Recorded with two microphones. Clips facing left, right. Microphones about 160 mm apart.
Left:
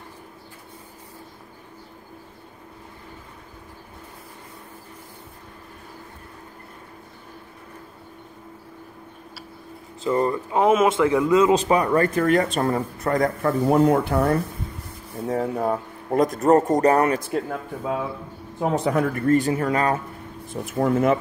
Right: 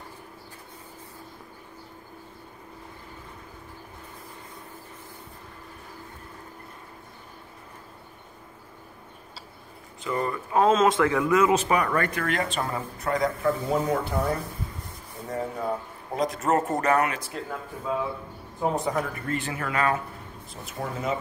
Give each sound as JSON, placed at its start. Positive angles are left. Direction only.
{"t": 10.0, "sound": "a man's voice", "side_deg": 35}
{"t": 10.5, "sound": "speech", "side_deg": 15}
{"t": 12.0, "sound": "speech", "side_deg": 35}
{"t": 17.2, "sound": "speech", "side_deg": 55}
{"t": 18.6, "sound": "speech", "side_deg": 70}
{"t": 19.2, "sound": "a man's voice", "side_deg": 40}
{"t": 20.6, "sound": "speech", "side_deg": 60}